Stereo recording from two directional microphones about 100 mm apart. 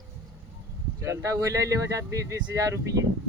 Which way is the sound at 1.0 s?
30° right (ahead or behind).